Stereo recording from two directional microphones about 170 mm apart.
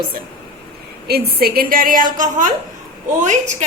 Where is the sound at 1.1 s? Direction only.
65° right (ahead or behind); by 3.6 s 45° right (ahead or behind).